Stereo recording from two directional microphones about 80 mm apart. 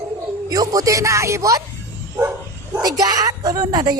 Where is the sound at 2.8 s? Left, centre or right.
Right.